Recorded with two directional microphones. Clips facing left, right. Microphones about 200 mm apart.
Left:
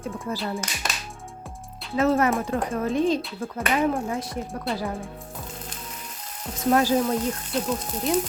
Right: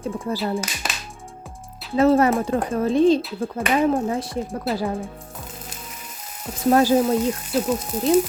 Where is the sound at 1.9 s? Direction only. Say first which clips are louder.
Right 5 dB; 30° right (ahead or behind).